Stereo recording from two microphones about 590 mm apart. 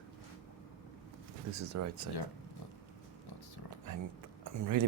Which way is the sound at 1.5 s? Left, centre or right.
Right.